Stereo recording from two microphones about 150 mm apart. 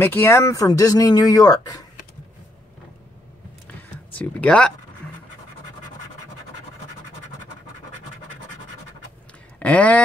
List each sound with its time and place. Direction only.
0.0 s speech: 15° left (ahead or behind)
4.1 s speech: 10° left (ahead or behind)
9.6 s speech: 10° left (ahead or behind)